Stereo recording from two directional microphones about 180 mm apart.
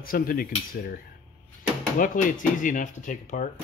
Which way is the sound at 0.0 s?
50° left (ahead or behind).